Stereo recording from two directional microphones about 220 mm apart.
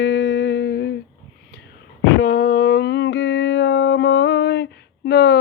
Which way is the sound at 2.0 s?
40° left (ahead or behind).